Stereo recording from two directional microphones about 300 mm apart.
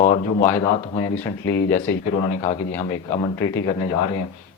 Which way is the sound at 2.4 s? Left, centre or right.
Centre.